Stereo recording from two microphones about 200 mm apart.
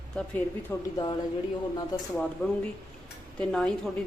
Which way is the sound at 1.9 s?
20° left (ahead or behind).